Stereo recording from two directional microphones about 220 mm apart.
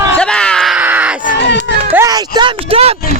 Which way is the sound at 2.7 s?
25° right (ahead or behind).